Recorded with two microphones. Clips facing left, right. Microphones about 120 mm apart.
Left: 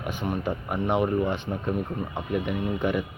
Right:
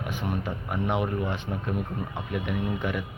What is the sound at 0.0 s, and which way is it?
Speech, centre (ahead or behind).